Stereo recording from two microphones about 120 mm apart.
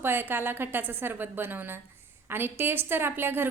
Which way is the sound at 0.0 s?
20° right (ahead or behind).